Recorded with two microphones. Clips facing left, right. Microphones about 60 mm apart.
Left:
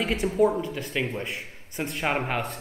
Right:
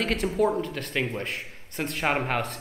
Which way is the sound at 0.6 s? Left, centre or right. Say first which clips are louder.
Even; right.